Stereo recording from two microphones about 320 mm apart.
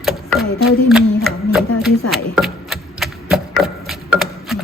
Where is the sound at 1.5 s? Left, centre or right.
Centre.